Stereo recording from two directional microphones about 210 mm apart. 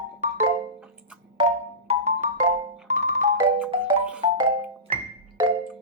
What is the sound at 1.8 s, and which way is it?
Marimba, 30° right (ahead or behind).